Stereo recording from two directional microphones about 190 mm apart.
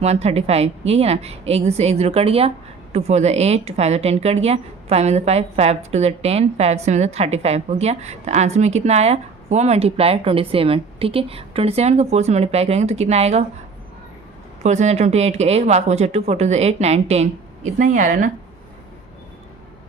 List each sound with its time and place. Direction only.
0.0 s a woman's voice: 35° right (ahead or behind)
14.6 s a woman's voice: 35° right (ahead or behind)